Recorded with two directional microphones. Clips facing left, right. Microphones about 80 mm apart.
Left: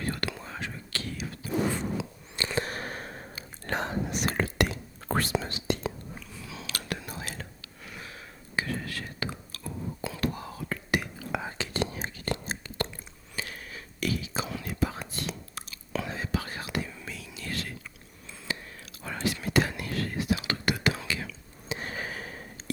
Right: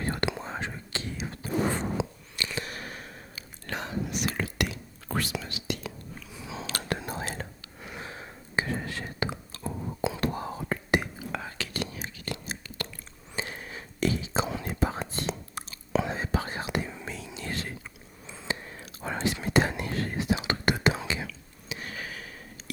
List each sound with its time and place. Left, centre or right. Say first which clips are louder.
0.0 s whispering: right 3 dB; right
2.0 s a sound: right 6 dB; right
2.3 s whispering: left 5 dB; left
6.3 s whispering: right 5 dB; right
11.4 s whispering: left 3 dB; left
13.3 s whispering: right 3 dB; right
21.7 s a sound: left 3 dB; left